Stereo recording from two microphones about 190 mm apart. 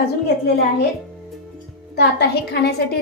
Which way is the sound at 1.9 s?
60° left (ahead or behind).